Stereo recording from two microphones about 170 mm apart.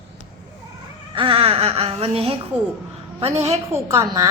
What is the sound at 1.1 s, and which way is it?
A woman's voice, 30° right (ahead or behind).